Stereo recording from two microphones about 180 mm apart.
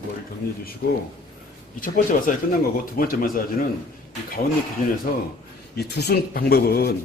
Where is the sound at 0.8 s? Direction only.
60° left (ahead or behind).